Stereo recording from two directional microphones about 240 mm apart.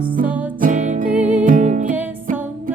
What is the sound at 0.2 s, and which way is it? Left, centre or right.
Music, right.